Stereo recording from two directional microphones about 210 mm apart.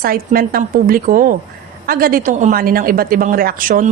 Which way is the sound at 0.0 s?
45° right (ahead or behind).